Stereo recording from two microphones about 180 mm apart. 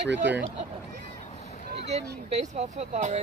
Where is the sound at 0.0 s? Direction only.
75° right (ahead or behind).